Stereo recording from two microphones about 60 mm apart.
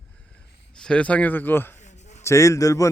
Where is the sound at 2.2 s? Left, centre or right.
Left.